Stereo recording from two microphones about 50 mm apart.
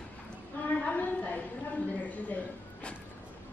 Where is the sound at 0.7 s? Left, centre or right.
Left.